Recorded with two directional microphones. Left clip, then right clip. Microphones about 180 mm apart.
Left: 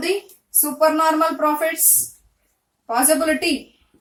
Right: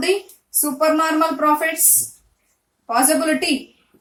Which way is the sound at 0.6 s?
15° right (ahead or behind).